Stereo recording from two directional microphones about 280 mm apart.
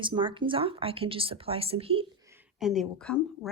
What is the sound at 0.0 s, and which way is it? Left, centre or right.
Speech, centre.